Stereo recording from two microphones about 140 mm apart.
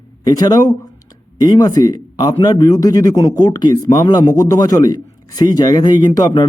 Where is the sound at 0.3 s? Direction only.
30° left (ahead or behind).